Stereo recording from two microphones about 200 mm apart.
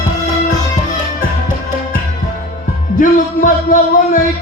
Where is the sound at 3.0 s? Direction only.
40° left (ahead or behind).